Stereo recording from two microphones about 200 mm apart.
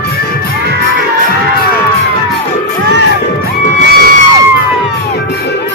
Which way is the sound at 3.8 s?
50° right (ahead or behind).